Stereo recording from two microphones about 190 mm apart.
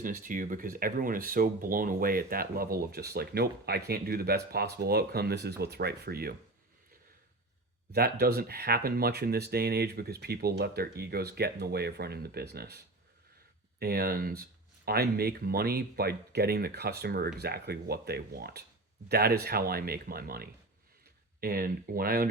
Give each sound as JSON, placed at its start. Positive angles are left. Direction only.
{"t": 0.0, "sound": "speech", "side_deg": -45}
{"t": 7.9, "sound": "speech", "side_deg": -55}